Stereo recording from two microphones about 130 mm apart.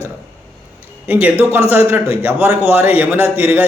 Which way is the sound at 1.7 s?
20° right (ahead or behind).